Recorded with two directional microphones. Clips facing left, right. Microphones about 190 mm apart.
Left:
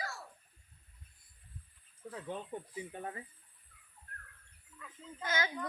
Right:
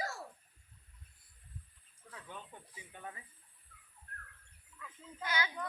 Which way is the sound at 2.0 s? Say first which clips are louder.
Left 9 dB; 35° left (ahead or behind).